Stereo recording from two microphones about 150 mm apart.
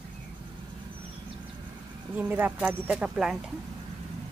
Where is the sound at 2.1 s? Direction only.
10° right (ahead or behind).